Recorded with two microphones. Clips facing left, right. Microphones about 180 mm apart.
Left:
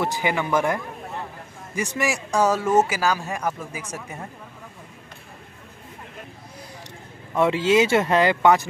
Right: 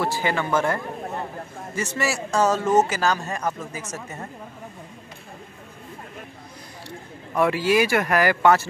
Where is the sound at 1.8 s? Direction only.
15° left (ahead or behind).